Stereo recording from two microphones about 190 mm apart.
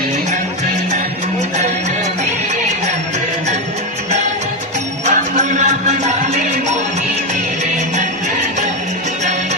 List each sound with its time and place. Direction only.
5.0 s music: 35° right (ahead or behind)